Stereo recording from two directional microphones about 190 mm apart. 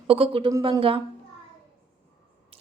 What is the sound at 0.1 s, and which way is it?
Speech, 30° right (ahead or behind).